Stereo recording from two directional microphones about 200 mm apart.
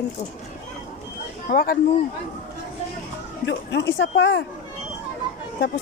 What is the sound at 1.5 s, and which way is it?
Speech, 50° left (ahead or behind).